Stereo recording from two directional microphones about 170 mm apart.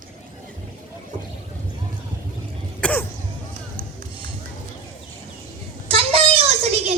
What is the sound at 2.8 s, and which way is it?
Cough, 10° left (ahead or behind).